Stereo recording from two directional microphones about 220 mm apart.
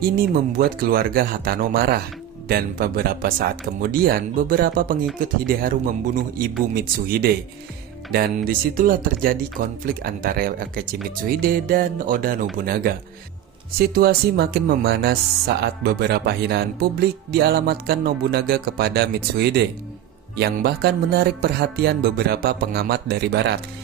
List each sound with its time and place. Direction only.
0.2 s speech: 40° right (ahead or behind)